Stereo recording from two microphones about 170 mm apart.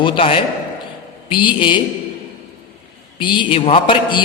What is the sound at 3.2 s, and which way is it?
A man's voice, 30° left (ahead or behind).